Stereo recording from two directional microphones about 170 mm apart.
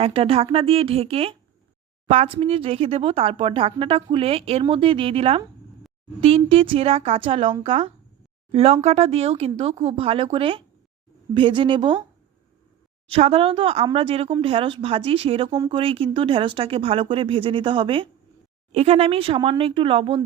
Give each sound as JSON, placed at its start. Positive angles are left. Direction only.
{"t": 0.0, "sound": "speech", "side_deg": -35}
{"t": 13.1, "sound": "speech", "side_deg": -35}